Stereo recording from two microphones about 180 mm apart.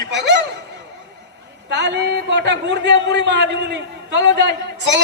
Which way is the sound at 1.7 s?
75° right (ahead or behind).